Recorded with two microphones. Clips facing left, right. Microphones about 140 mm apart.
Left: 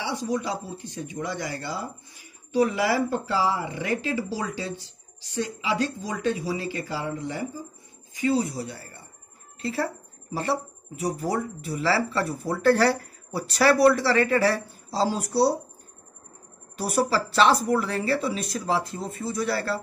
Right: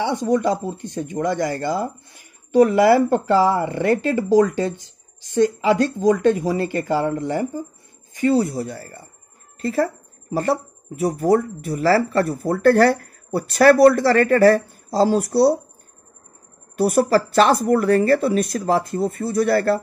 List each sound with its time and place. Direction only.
0.0 s speech: 55° right (ahead or behind)
10.3 s speech: 50° right (ahead or behind)
16.7 s speech: 50° right (ahead or behind)